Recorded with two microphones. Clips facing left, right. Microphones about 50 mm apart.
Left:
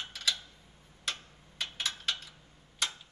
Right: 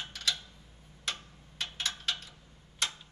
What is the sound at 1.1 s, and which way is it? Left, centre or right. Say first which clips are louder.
Tick-tock: even; centre.